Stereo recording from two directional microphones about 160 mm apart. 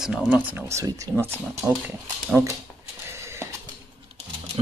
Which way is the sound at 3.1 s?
15° right (ahead or behind).